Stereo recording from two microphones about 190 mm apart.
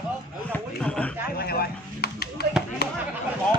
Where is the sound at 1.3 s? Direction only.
55° left (ahead or behind).